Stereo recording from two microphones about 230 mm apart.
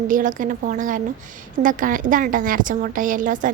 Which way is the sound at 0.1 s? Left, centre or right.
Right.